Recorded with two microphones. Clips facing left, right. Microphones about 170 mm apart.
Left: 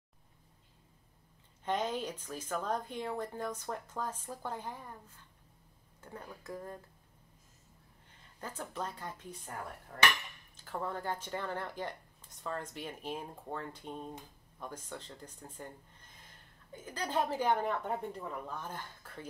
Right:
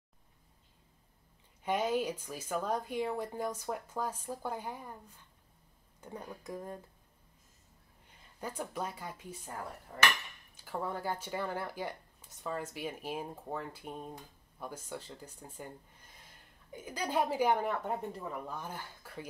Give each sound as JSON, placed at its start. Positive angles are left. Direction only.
{"t": 1.6, "sound": "speech", "side_deg": -10}
{"t": 5.9, "sound": "speech", "side_deg": -15}
{"t": 8.4, "sound": "speech", "side_deg": -10}
{"t": 16.7, "sound": "speech", "side_deg": -15}